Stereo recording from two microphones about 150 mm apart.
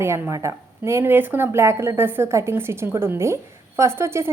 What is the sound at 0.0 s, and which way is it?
Speech, 20° right (ahead or behind).